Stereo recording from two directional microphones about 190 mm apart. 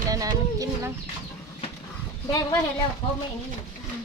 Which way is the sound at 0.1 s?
20° right (ahead or behind).